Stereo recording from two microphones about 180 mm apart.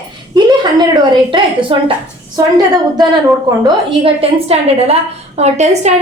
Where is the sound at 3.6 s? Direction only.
35° right (ahead or behind).